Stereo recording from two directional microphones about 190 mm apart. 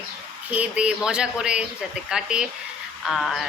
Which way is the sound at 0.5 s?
5° right (ahead or behind).